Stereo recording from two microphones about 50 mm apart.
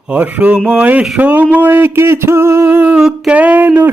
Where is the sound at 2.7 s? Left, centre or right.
Right.